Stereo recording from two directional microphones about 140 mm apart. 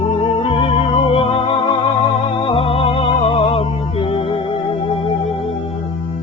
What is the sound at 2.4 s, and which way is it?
Music, 40° left (ahead or behind).